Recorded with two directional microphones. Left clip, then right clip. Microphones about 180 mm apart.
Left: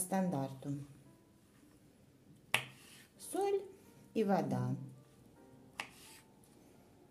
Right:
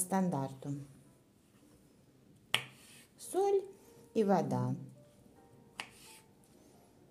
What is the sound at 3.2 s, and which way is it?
A woman's voice, 30° right (ahead or behind).